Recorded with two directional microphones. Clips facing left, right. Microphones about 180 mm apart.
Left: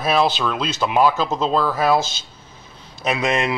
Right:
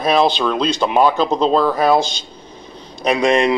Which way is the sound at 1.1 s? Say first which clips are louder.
Right 5 dB; 5° left (ahead or behind).